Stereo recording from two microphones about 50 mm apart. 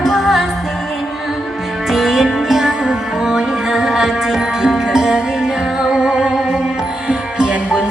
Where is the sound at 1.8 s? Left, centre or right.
Centre.